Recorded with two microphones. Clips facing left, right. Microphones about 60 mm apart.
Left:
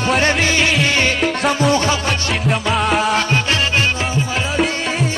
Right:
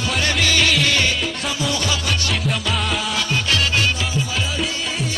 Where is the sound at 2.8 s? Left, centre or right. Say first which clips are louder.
Left 7 dB; left.